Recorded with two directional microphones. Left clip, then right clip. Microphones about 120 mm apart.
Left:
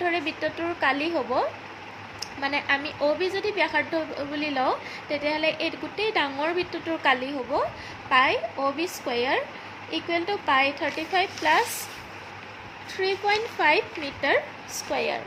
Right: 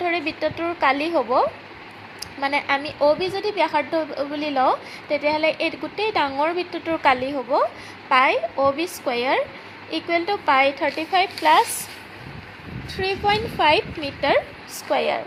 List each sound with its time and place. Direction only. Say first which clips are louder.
0.0 s a woman's voice: right 3 dB; 25° right (ahead or behind)
13.0 s a woman's voice: right 3 dB; 25° right (ahead or behind)